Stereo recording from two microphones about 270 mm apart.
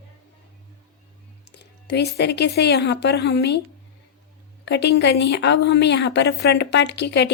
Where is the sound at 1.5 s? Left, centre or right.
Left.